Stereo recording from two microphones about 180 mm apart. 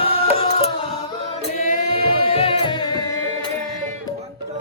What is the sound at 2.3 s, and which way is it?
Music, 30° left (ahead or behind).